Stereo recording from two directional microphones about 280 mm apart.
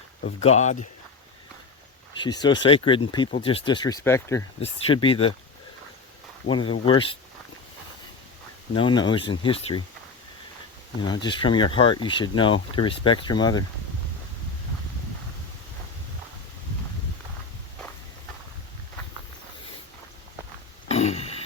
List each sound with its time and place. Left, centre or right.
0.4 s speech: left
2.4 s speech: centre
6.5 s speech: centre
8.7 s speech: centre
11.0 s speech: centre
20.8 s a sound: left